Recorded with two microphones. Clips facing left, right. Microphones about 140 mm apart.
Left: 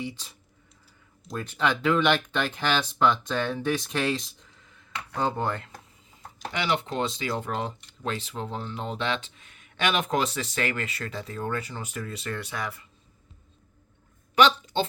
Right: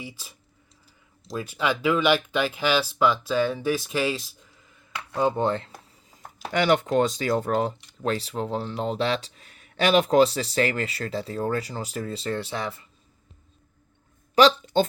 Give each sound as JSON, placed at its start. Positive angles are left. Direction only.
{"t": 0.0, "sound": "speech", "side_deg": -5}
{"t": 1.4, "sound": "speech", "side_deg": -5}
{"t": 5.4, "sound": "speech", "side_deg": -25}
{"t": 6.5, "sound": "speech", "side_deg": -45}
{"t": 14.3, "sound": "a sound", "side_deg": -40}